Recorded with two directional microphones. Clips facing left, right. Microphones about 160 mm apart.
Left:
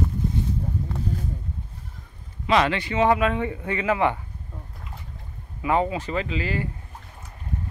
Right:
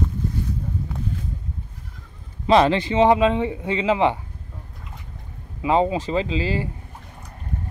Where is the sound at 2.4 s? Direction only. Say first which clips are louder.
Right 5 dB; 30° right (ahead or behind).